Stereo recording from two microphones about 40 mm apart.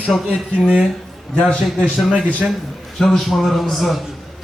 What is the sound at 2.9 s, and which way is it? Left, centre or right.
A man's voice, centre.